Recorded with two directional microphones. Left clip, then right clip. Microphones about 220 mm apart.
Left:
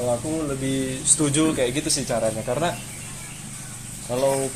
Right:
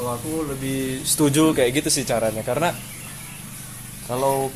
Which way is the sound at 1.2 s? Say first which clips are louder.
Right 5 dB; 40° right (ahead or behind).